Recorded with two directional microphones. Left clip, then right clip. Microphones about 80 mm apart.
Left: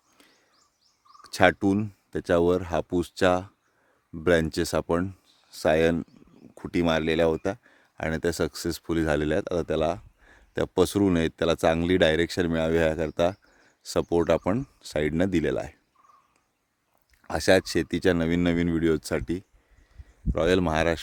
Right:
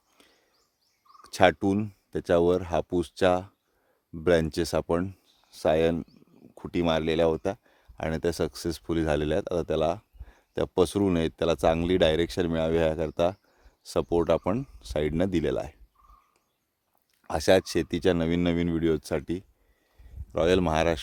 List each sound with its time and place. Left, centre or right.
1.2 s speech: centre
17.2 s speech: centre